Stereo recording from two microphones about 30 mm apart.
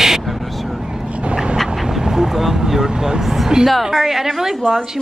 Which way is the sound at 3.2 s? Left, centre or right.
Centre.